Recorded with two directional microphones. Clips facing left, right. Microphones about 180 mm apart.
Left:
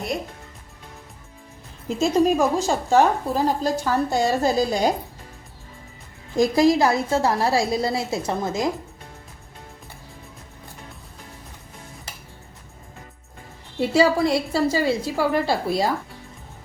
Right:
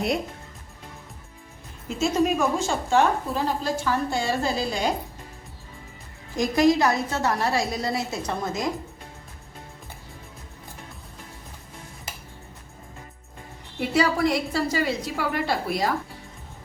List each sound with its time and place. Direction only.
2.0 s a woman's voice: 35° left (ahead or behind)
6.3 s a woman's voice: 30° left (ahead or behind)
13.7 s a woman's voice: 30° left (ahead or behind)